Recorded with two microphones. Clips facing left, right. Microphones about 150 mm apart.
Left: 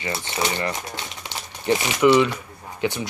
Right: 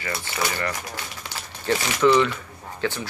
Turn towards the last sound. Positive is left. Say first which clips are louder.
# left 2 dB
turn(degrees=15)  # may be behind; listen again after turning